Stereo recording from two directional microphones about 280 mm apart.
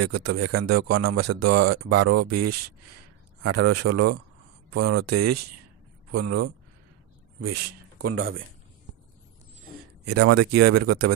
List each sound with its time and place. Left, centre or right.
0.0 s speech: right
10.0 s speech: right